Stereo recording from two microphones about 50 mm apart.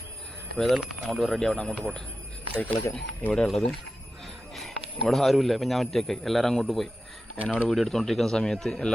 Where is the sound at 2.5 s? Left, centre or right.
Left.